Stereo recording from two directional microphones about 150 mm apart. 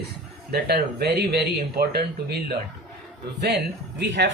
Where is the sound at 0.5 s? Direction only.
90° right.